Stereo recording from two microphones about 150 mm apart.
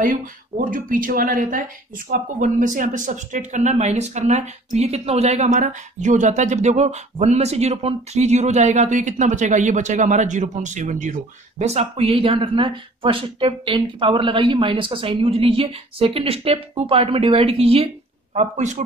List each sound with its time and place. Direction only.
0.0 s speech: 65° right (ahead or behind); by 17.8 s 40° right (ahead or behind)
18.3 s speech: 50° right (ahead or behind)